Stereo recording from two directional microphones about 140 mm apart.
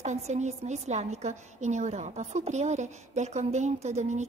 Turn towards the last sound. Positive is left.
turn(degrees=-55)  # may be behind; listen again after turning